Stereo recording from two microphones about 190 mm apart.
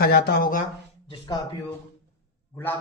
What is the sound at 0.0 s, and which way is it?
Speech, 60° left (ahead or behind).